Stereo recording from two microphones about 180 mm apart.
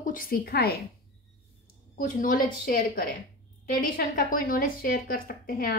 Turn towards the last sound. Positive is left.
turn(degrees=55)  # may be behind; listen again after turning